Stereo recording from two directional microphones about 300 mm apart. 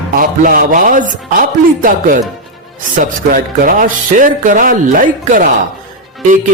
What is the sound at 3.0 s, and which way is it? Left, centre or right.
Speech, right.